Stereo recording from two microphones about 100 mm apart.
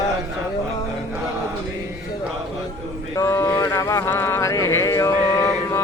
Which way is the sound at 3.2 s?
30° left (ahead or behind).